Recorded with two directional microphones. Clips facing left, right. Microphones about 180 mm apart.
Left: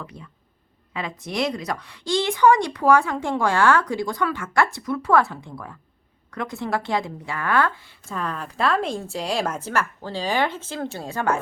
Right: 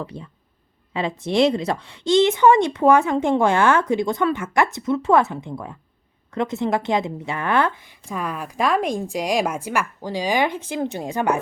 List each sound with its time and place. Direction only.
0.0 s a woman's voice: 30° right (ahead or behind)